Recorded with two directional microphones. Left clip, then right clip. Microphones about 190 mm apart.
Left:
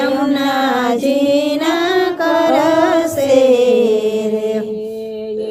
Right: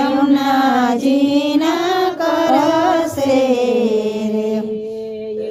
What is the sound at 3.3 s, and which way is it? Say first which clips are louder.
Music: left 5 dB; 45° left (ahead or behind).